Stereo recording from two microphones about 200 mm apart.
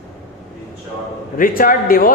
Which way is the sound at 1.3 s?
45° left (ahead or behind).